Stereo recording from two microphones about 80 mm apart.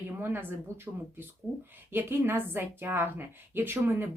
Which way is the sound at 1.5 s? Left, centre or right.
Right.